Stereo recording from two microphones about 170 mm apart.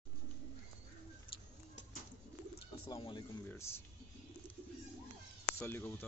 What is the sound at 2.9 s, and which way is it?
Speech, 30° left (ahead or behind).